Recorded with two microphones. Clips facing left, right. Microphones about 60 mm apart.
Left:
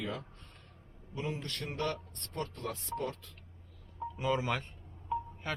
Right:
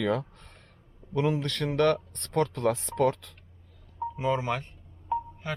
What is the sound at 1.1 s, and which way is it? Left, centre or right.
Speech, right.